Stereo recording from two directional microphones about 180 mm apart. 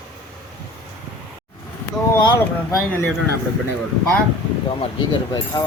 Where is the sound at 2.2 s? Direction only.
15° left (ahead or behind).